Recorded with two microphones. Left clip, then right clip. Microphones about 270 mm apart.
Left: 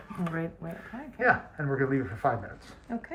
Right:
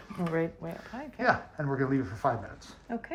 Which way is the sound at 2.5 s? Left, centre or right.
Right.